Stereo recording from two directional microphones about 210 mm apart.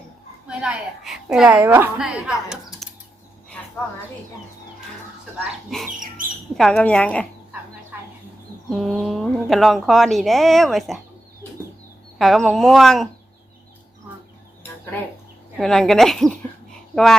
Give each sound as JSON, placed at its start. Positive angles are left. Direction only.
{"t": 0.4, "sound": "speech", "side_deg": -5}
{"t": 2.5, "sound": "typing", "side_deg": 0}
{"t": 5.4, "sound": "speech", "side_deg": -5}
{"t": 6.0, "sound": "speech", "side_deg": -40}
{"t": 6.6, "sound": "speech", "side_deg": 5}
{"t": 7.9, "sound": "a sound", "side_deg": -10}
{"t": 8.7, "sound": "speech", "side_deg": 0}
{"t": 12.2, "sound": "speech", "side_deg": 0}
{"t": 15.5, "sound": "speech", "side_deg": 0}